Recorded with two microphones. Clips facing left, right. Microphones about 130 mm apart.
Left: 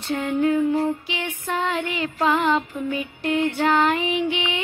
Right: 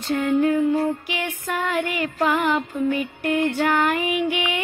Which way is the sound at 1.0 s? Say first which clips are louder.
Right 1 dB; 20° left (ahead or behind).